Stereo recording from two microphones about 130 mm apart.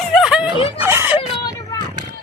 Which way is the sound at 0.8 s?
15° right (ahead or behind).